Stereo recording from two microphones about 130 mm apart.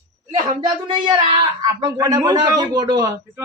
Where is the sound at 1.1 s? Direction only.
35° right (ahead or behind).